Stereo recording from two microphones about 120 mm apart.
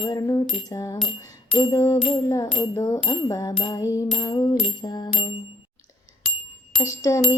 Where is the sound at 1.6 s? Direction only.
40° left (ahead or behind).